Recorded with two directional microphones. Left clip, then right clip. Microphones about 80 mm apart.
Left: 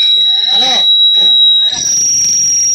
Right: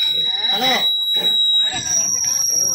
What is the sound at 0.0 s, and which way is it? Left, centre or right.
Fire alarm, left.